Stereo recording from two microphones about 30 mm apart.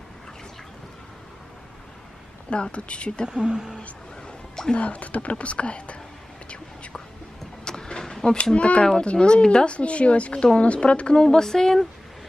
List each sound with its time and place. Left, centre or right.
2.5 s speech: left
3.3 s speech: right
4.7 s speech: left
7.6 s vehicle: left
8.5 s speech: left
11.1 s a woman's voice: left